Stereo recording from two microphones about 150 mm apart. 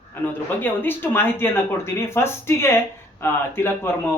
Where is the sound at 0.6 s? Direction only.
15° left (ahead or behind).